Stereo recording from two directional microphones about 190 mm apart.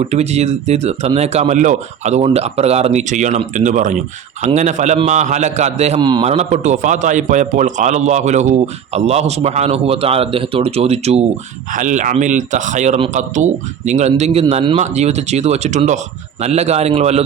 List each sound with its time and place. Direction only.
0.0 s speech: 35° right (ahead or behind)
6.0 s a man's voice: 25° right (ahead or behind)
6.2 s speech: 35° right (ahead or behind)